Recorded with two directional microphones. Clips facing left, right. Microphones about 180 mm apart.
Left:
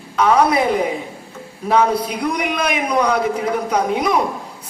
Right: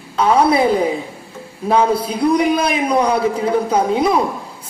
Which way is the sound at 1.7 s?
30° right (ahead or behind).